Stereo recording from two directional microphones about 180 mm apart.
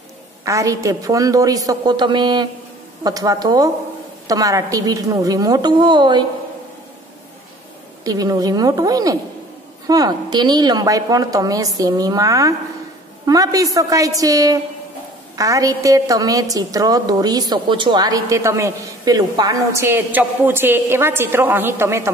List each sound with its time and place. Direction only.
0.5 s a woman's voice: 15° right (ahead or behind)
8.0 s a woman's voice: 20° right (ahead or behind)